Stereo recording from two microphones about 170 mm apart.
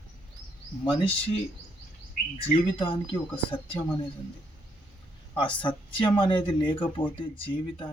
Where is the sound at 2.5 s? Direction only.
30° left (ahead or behind).